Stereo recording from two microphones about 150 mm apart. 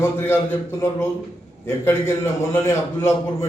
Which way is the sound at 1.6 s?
15° left (ahead or behind).